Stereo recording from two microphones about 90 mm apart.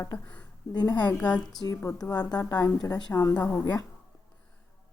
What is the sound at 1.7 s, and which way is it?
Speech, 30° left (ahead or behind).